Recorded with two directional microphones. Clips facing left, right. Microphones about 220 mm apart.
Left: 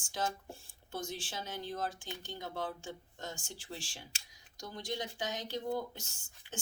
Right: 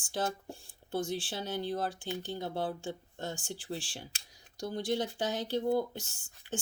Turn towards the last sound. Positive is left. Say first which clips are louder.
# right 8 dB
turn(degrees=-35)  # may be behind; listen again after turning